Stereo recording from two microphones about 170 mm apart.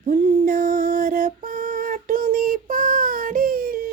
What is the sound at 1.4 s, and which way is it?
Child singing, 55° right (ahead or behind).